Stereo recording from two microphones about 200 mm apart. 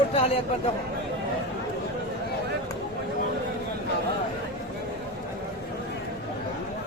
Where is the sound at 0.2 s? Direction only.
30° left (ahead or behind).